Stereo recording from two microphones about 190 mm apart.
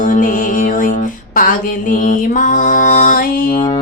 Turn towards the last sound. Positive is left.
turn(degrees=50)  # may be behind; listen again after turning